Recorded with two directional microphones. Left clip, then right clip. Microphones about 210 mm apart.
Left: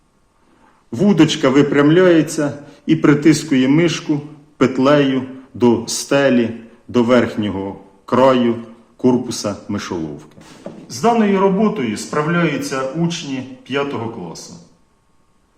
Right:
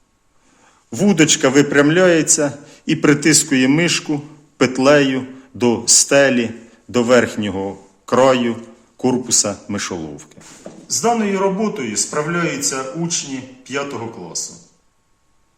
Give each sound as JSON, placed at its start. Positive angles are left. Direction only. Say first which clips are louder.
{"t": 0.9, "sound": "a man's voice", "louder": "even", "side_deg": -35}
{"t": 10.8, "sound": "a man's voice", "louder": "left 2 dB", "side_deg": -10}